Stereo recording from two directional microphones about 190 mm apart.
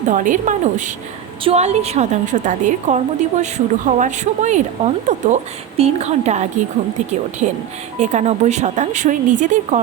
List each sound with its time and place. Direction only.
0.1 s a woman's voice: 40° right (ahead or behind)